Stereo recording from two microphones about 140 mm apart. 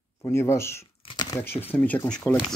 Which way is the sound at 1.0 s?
30° left (ahead or behind).